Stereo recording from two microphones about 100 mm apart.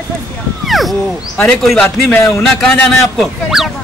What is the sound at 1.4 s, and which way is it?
Speech, centre (ahead or behind).